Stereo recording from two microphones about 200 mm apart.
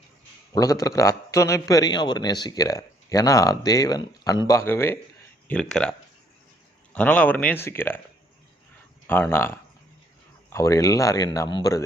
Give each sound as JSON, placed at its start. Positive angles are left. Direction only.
{"t": 0.5, "sound": "a man's voice", "side_deg": 15}
{"t": 6.9, "sound": "a man's voice", "side_deg": 5}
{"t": 9.0, "sound": "a man's voice", "side_deg": 10}
{"t": 10.5, "sound": "a man's voice", "side_deg": 15}